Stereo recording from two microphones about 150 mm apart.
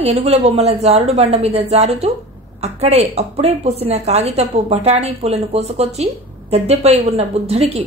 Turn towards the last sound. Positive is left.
turn(degrees=-45)  # may be behind; listen again after turning